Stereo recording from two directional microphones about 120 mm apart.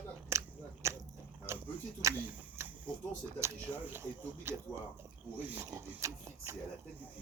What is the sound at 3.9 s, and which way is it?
Speech, 20° right (ahead or behind).